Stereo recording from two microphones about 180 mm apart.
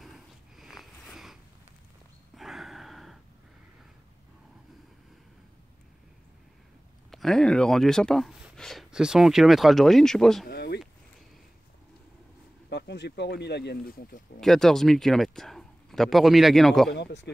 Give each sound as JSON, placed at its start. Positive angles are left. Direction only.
{"t": 0.0, "sound": "a sound", "side_deg": 0}
{"t": 7.1, "sound": "speech", "side_deg": 0}
{"t": 10.5, "sound": "a sound", "side_deg": 65}
{"t": 12.6, "sound": "speech", "side_deg": 70}
{"t": 14.4, "sound": "speech", "side_deg": 0}
{"t": 16.9, "sound": "speech", "side_deg": 75}